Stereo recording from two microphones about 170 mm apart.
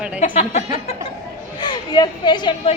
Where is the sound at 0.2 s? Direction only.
40° left (ahead or behind).